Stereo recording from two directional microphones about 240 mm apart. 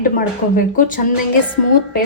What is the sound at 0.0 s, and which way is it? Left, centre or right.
A woman's voice, left.